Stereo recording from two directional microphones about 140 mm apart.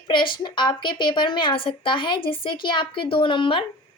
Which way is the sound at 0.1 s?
35° left (ahead or behind).